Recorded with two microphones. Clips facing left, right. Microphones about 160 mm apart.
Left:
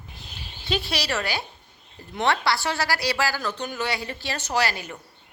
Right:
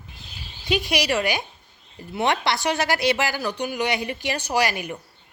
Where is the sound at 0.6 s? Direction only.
15° right (ahead or behind).